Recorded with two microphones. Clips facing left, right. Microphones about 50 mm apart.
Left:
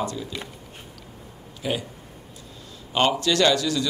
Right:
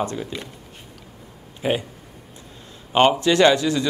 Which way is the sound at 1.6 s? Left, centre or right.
Right.